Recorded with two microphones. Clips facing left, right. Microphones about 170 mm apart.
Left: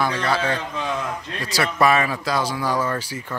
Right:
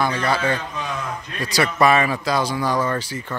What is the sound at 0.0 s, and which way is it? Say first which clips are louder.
Speech: right 1 dB; centre (ahead or behind).